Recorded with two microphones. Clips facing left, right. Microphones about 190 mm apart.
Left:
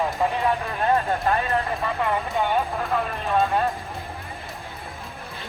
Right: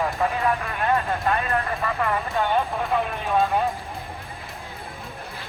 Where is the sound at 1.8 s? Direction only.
25° left (ahead or behind).